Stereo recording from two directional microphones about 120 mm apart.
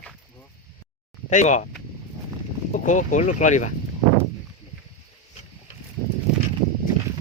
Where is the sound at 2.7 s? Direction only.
90° left.